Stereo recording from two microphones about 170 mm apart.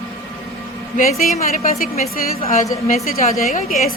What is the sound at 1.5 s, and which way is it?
A woman's voice, 55° left (ahead or behind).